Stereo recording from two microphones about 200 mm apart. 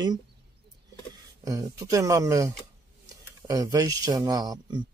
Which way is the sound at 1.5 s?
15° right (ahead or behind).